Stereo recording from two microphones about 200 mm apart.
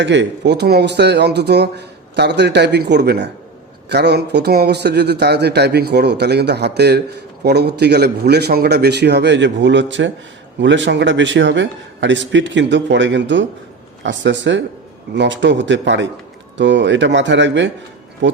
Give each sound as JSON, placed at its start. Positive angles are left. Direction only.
{"t": 0.0, "sound": "speech", "side_deg": -60}